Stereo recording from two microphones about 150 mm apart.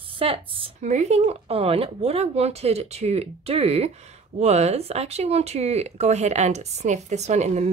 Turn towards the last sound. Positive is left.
turn(degrees=-50)  # may be behind; listen again after turning